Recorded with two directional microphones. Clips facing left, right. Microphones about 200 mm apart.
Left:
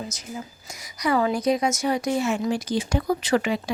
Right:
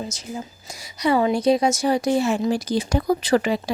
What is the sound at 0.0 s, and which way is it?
A woman's voice, 30° right (ahead or behind).